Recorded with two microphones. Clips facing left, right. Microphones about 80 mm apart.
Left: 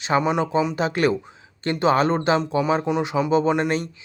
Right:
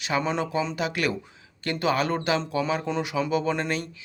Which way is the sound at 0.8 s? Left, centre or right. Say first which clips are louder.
Left 6 dB; left.